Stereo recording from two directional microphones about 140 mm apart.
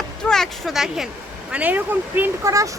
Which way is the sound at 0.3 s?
Centre (ahead or behind).